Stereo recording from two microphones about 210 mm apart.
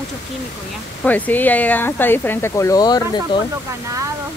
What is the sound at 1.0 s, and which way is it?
Speech, 10° left (ahead or behind).